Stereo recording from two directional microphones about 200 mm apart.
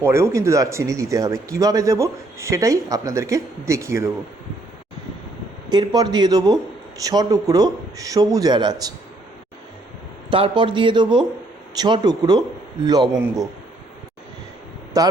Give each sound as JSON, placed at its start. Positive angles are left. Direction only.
{"t": 0.0, "sound": "speech", "side_deg": -15}
{"t": 5.7, "sound": "a man's voice", "side_deg": -20}
{"t": 10.3, "sound": "a man's voice", "side_deg": -25}
{"t": 15.0, "sound": "speech", "side_deg": -15}